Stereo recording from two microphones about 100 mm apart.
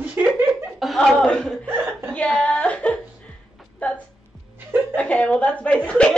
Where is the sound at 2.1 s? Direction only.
10° left (ahead or behind).